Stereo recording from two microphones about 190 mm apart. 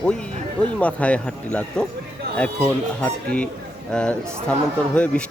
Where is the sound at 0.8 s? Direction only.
5° left (ahead or behind).